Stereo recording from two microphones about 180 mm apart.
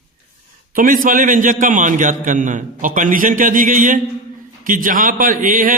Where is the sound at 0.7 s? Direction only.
50° right (ahead or behind).